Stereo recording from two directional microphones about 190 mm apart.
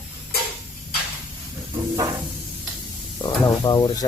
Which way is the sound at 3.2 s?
20° left (ahead or behind).